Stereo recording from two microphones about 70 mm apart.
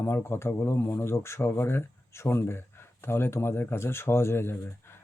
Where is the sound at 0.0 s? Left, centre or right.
Left.